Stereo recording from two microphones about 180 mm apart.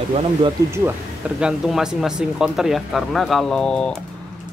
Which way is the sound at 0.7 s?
15° right (ahead or behind).